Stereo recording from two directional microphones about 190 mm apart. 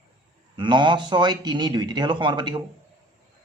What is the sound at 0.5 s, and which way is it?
Speech, 25° right (ahead or behind).